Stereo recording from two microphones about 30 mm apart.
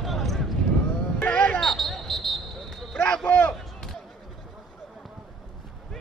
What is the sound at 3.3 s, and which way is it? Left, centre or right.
Speech, left.